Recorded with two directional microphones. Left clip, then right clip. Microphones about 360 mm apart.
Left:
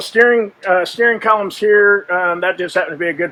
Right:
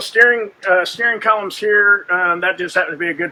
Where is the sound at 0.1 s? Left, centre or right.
Left.